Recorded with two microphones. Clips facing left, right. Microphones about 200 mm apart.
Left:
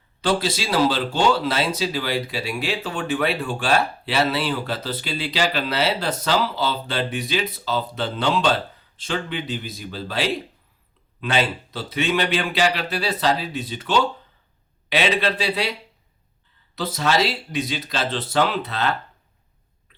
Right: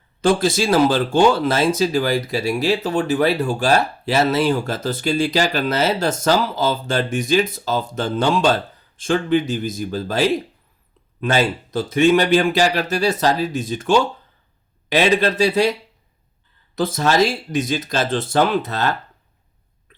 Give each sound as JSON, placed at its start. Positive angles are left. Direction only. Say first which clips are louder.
{"t": 0.2, "sound": "speech", "louder": "right 6 dB", "side_deg": -45}
{"t": 16.7, "sound": "speech", "louder": "right 4 dB", "side_deg": -50}